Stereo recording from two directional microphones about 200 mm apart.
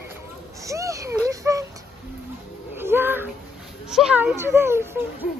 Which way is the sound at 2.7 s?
10° right (ahead or behind).